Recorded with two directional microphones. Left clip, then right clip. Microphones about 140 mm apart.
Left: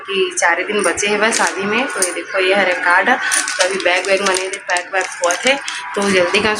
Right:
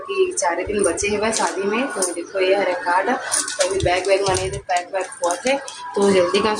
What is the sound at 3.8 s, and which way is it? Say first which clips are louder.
Speech: left 1 dB; 15° left (ahead or behind).